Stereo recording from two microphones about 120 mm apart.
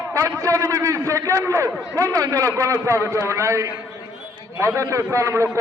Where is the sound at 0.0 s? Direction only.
25° right (ahead or behind).